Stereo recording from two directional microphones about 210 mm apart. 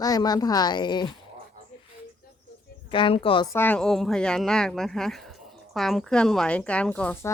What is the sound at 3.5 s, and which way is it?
Speech, 10° left (ahead or behind).